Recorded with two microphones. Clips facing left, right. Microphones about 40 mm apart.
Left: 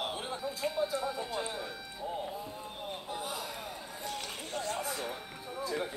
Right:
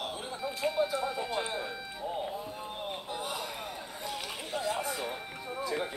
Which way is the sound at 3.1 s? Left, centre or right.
Right.